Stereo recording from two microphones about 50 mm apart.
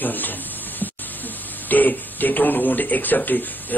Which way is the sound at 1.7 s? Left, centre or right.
Left.